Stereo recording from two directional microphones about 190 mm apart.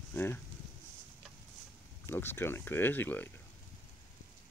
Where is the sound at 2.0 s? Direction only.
10° left (ahead or behind).